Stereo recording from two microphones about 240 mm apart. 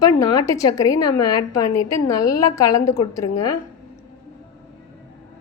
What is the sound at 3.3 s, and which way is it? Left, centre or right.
Speech, left.